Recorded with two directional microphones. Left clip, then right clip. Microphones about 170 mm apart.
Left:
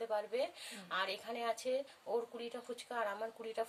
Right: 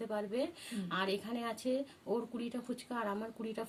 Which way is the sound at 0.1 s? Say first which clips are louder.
Right 1 dB; 15° left (ahead or behind).